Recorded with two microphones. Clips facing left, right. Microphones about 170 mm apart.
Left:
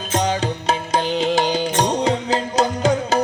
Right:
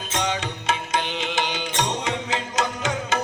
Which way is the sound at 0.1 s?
35° left (ahead or behind).